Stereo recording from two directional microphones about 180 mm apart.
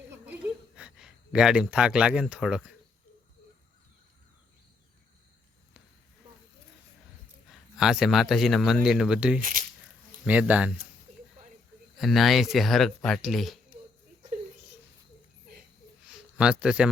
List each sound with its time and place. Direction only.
0.8 s speech: 5° right (ahead or behind)
7.5 s speech: centre (ahead or behind)
9.4 s speech: 50° right (ahead or behind)
10.2 s speech: 10° right (ahead or behind)
11.9 s speech: centre (ahead or behind)
16.0 s speech: 5° right (ahead or behind)